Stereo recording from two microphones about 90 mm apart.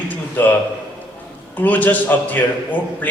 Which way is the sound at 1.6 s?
20° left (ahead or behind).